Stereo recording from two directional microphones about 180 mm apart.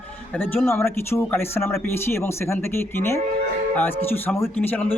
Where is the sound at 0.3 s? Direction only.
10° left (ahead or behind).